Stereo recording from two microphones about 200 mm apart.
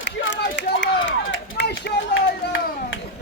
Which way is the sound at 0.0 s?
65° left (ahead or behind).